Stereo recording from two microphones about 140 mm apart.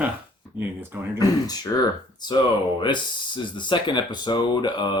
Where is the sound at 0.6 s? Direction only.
15° right (ahead or behind).